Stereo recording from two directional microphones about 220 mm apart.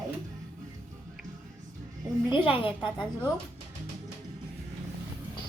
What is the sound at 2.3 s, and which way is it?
Speech, 25° left (ahead or behind).